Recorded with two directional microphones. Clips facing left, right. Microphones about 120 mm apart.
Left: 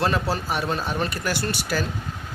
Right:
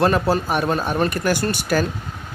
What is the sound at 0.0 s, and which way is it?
Speech, 50° right (ahead or behind).